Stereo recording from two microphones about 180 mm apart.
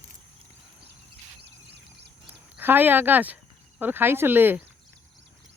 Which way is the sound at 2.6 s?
10° right (ahead or behind).